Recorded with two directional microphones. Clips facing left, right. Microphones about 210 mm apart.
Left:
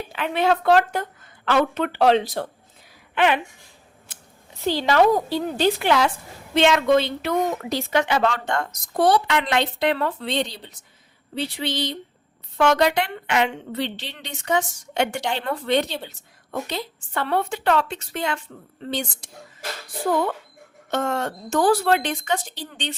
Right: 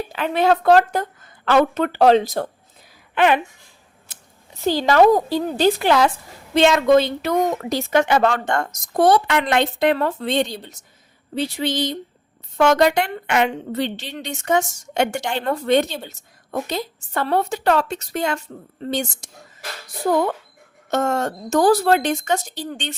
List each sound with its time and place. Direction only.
0.1 s a woman's voice: 40° right (ahead or behind)
4.6 s a woman's voice: 45° right (ahead or behind)